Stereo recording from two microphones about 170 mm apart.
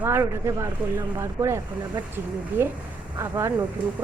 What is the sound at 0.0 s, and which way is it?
Speech, 10° right (ahead or behind).